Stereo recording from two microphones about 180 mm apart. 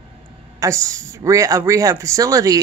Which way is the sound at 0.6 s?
15° right (ahead or behind).